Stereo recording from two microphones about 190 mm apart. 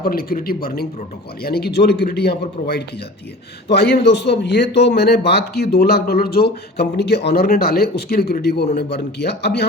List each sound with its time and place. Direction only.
0.0 s speech: 55° left (ahead or behind)